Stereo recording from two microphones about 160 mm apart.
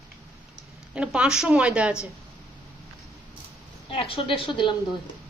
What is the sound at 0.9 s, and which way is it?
A woman's voice, 5° right (ahead or behind).